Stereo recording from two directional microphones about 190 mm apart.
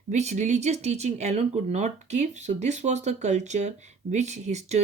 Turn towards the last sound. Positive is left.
turn(degrees=-35)  # may be behind; listen again after turning